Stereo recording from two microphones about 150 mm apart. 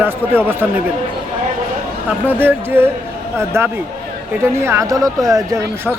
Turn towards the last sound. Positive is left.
turn(degrees=-20)  # may be behind; listen again after turning